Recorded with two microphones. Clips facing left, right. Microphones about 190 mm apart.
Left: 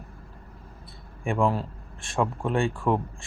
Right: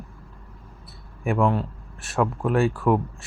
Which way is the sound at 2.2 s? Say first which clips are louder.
Right 3 dB; 30° left (ahead or behind).